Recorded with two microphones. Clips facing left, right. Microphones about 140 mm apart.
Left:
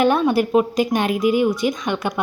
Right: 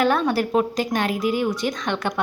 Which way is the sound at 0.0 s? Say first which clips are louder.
Left 3 dB; 20° left (ahead or behind).